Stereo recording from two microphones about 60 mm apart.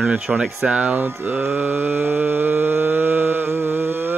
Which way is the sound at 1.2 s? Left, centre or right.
Right.